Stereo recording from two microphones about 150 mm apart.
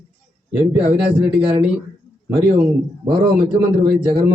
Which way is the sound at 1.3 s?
40° right (ahead or behind).